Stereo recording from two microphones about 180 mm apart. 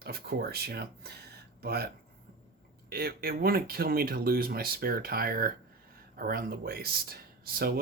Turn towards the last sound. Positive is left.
turn(degrees=-60)  # may be behind; listen again after turning